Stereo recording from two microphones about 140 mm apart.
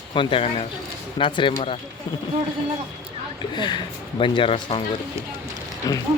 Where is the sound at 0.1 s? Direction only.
35° left (ahead or behind).